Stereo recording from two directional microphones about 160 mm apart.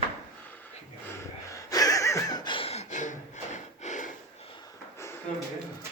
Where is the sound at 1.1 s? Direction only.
20° left (ahead or behind); by 4.1 s 50° left (ahead or behind).